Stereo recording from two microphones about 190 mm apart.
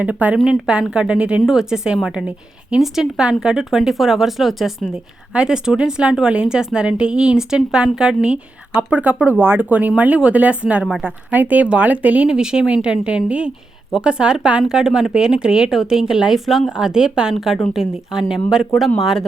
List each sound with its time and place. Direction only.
0.0 s a woman's voice: 5° right (ahead or behind)